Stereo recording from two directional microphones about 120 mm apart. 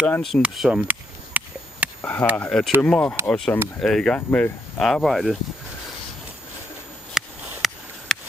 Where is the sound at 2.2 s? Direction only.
15° left (ahead or behind).